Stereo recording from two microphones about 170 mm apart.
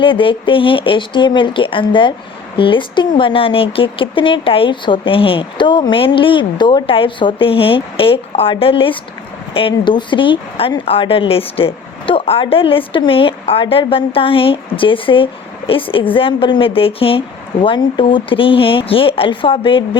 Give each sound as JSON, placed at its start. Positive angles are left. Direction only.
{"t": 0.0, "sound": "speech", "side_deg": 30}